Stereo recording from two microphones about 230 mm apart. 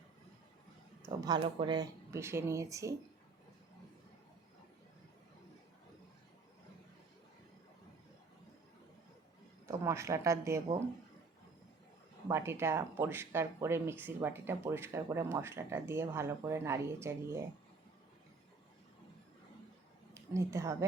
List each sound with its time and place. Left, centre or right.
1.0 s speech: centre
9.6 s speech: centre
12.3 s speech: centre
20.1 s speech: centre